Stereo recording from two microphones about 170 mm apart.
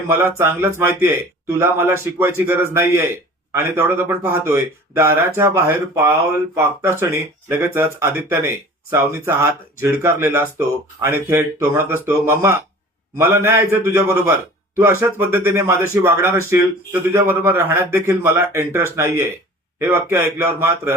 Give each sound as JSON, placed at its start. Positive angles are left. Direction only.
{"t": 0.1, "sound": "speech", "side_deg": -15}